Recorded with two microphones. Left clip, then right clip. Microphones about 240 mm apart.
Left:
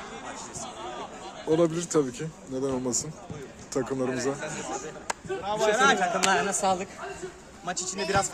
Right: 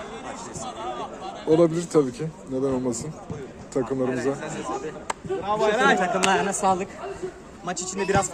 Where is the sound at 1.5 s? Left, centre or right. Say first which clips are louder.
Right 5 dB; centre.